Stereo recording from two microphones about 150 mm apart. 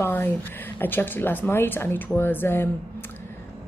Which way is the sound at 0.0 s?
15° left (ahead or behind).